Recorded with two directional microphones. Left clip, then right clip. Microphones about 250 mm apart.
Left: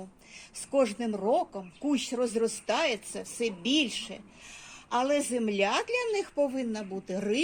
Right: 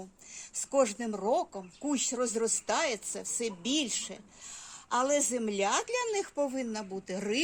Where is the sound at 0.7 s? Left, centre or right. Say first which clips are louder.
Left 1 dB; centre.